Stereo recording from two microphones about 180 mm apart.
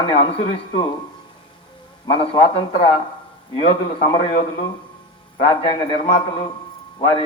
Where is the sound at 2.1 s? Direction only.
30° left (ahead or behind).